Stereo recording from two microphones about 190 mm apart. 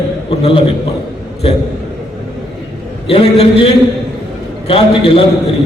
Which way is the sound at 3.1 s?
30° left (ahead or behind).